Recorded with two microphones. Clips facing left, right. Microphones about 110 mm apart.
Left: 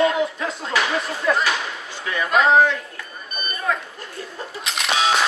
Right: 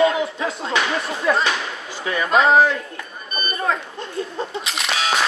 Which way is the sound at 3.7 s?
30° right (ahead or behind).